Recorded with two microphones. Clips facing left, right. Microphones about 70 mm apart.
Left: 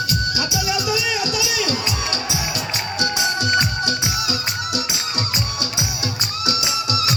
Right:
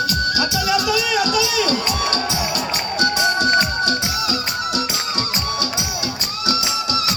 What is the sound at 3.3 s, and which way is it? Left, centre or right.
Music, right.